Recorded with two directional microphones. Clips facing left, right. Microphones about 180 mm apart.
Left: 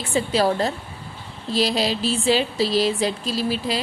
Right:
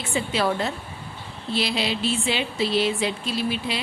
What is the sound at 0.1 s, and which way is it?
Speech, 35° left (ahead or behind).